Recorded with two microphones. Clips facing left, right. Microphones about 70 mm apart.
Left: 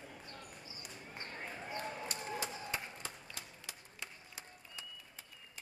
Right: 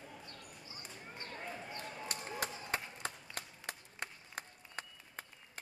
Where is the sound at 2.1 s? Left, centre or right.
Right.